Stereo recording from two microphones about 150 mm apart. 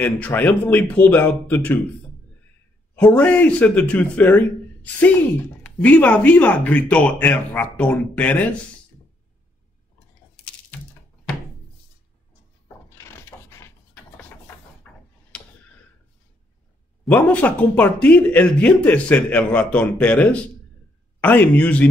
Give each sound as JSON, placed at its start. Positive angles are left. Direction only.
{"t": 0.0, "sound": "speech", "side_deg": 10}
{"t": 3.0, "sound": "speech", "side_deg": 10}
{"t": 12.6, "sound": "wood", "side_deg": 20}
{"t": 14.8, "sound": "mechanisms", "side_deg": 5}
{"t": 15.3, "sound": "a sound", "side_deg": 5}
{"t": 17.1, "sound": "speech", "side_deg": 10}